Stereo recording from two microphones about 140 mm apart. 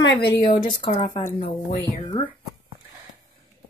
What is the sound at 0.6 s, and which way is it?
Speech, 35° left (ahead or behind).